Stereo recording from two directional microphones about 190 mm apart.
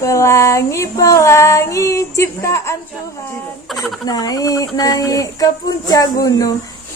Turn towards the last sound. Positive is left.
turn(degrees=20)  # may be behind; listen again after turning